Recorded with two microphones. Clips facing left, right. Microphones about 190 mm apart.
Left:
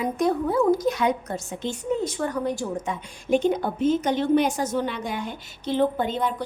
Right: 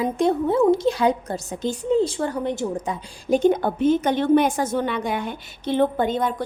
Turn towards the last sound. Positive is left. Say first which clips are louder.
# right 2 dB
turn(degrees=-55)  # may be behind; listen again after turning